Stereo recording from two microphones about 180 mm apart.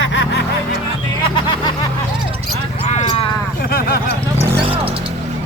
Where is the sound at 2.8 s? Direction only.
40° left (ahead or behind).